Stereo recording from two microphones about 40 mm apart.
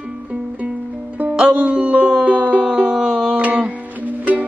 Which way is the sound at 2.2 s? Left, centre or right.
Right.